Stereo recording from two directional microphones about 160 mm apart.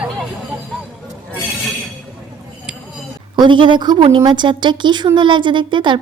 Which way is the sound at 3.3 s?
30° right (ahead or behind).